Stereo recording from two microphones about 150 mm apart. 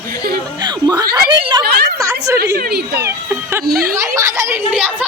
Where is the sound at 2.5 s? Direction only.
75° right (ahead or behind).